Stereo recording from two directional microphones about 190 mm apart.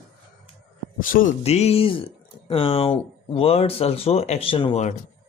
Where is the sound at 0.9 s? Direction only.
45° left (ahead or behind).